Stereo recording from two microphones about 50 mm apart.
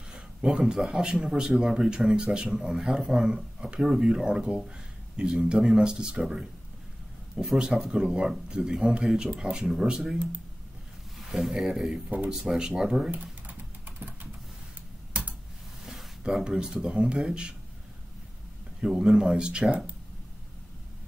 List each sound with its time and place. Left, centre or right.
0.4 s speech: right
0.7 s speech: centre
13.1 s typing: right
15.8 s a sound: centre
16.4 s speech: centre
18.8 s speech: centre